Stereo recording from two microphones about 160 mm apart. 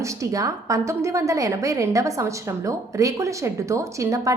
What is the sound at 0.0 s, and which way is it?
A woman's voice, 20° right (ahead or behind).